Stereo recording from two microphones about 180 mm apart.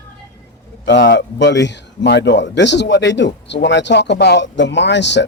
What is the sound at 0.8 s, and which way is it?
Speech, 75° left (ahead or behind).